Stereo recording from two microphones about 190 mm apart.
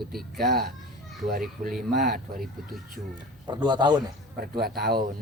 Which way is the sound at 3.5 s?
20° right (ahead or behind).